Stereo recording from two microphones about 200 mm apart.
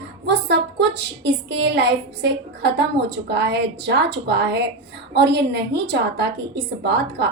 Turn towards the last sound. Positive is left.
turn(degrees=-55)  # may be behind; listen again after turning